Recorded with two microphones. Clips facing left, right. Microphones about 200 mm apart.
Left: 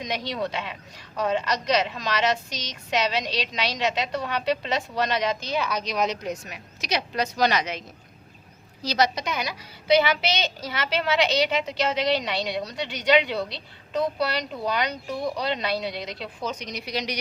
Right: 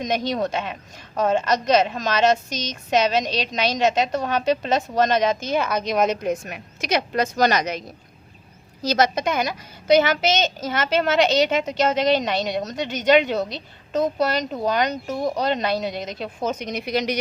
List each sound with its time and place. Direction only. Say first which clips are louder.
0.0 s a child's voice: right 6 dB; 45° right (ahead or behind)